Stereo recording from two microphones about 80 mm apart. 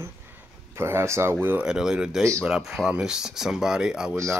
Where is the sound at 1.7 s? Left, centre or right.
Centre.